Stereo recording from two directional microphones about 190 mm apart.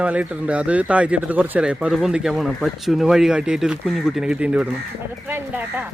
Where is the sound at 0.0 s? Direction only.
5° right (ahead or behind).